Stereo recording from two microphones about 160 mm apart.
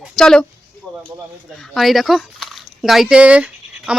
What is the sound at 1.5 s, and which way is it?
Speech, centre (ahead or behind).